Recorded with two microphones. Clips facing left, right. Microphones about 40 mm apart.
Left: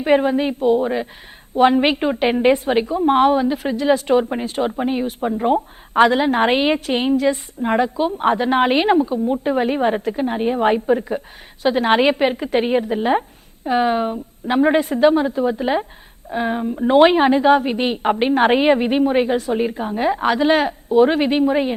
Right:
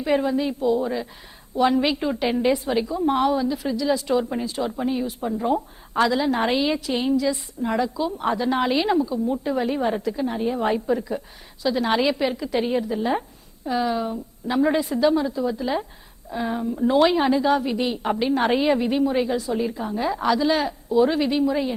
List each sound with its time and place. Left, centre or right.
0.0 s a woman's voice: left